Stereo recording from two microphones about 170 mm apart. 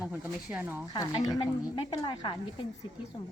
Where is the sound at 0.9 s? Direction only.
25° left (ahead or behind).